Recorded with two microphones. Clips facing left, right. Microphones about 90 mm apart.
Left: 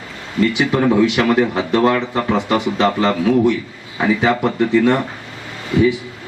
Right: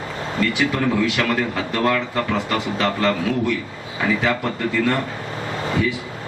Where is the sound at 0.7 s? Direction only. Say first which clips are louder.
Left 6 dB; 20° left (ahead or behind).